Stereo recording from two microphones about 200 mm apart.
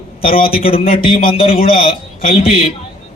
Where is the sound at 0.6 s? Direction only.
30° left (ahead or behind).